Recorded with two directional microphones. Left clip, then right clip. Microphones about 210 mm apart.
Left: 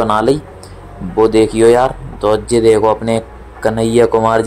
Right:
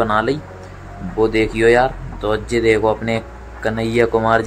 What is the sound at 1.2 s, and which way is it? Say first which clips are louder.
Speech: left 6 dB; 15° left (ahead or behind).